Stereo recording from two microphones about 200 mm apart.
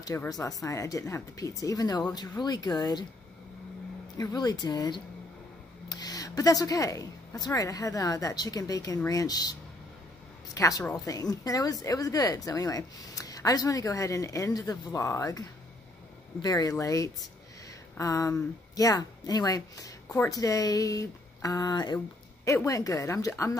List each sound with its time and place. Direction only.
0.0 s a woman's voice: 15° left (ahead or behind)
4.2 s a woman's voice: 20° left (ahead or behind)